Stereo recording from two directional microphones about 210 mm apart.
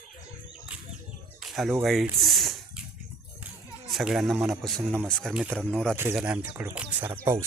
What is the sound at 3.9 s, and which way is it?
A man's voice, centre (ahead or behind).